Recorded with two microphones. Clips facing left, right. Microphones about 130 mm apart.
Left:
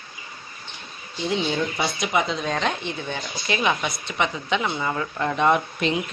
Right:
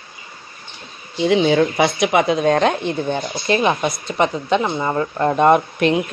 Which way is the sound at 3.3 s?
40° right (ahead or behind).